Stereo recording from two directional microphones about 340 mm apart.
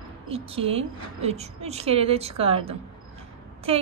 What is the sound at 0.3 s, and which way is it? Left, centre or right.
A woman's voice, centre.